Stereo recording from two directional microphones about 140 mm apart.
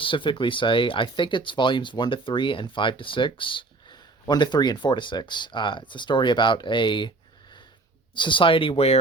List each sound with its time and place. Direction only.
0.0 s speech: 35° left (ahead or behind)
8.1 s speech: 35° left (ahead or behind)